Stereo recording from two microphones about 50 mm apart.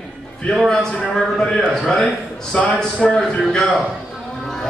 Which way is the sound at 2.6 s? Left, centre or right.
Centre.